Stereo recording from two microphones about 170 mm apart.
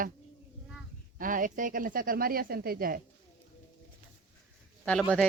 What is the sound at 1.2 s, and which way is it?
Speech, 50° right (ahead or behind).